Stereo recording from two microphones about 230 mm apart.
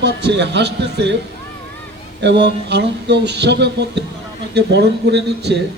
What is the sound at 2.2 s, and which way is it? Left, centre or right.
A man's voice, right.